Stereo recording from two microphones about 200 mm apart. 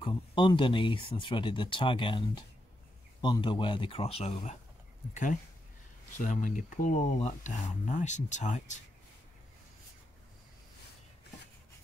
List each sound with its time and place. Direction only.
0.0 s speech: 25° left (ahead or behind)